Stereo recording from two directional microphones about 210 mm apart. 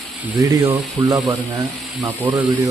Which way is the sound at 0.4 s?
15° right (ahead or behind).